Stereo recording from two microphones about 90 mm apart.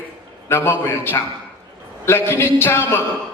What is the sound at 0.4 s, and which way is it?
Speech, 25° left (ahead or behind).